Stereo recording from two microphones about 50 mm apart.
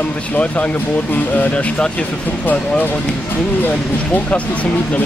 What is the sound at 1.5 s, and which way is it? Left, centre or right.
Speech, left.